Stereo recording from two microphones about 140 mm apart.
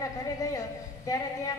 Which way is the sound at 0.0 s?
25° left (ahead or behind).